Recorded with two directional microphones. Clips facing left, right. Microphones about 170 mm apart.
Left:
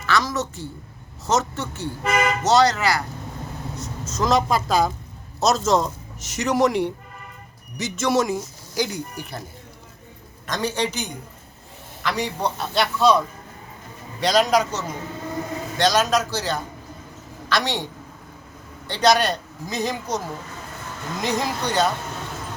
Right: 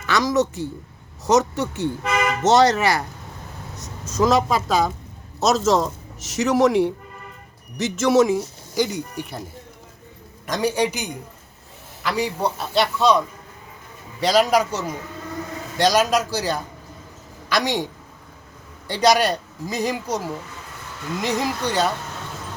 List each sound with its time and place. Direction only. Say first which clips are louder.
0.0 s a woman's voice: right 4 dB; 15° right (ahead or behind)
3.8 s speech: right 5 dB; 15° right (ahead or behind)
10.4 s a woman's voice: right 3 dB; 10° right (ahead or behind)
18.9 s a woman's voice: right 1 dB; 10° right (ahead or behind)
21.2 s speech: right 1 dB; 5° right (ahead or behind)